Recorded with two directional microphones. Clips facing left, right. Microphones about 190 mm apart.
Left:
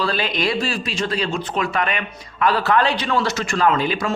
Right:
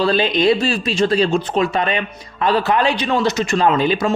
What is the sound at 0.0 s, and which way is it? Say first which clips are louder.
Speech: right 7 dB; 25° right (ahead or behind).